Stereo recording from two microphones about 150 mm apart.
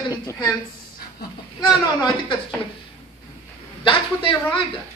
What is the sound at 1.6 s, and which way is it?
Speech, 30° left (ahead or behind).